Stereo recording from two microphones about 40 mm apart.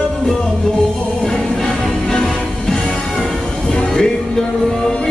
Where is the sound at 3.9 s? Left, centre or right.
Centre.